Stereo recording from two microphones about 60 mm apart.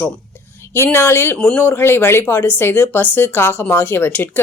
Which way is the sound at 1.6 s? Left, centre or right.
Left.